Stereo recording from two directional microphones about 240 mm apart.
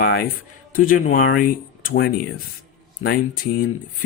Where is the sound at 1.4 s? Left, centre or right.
Left.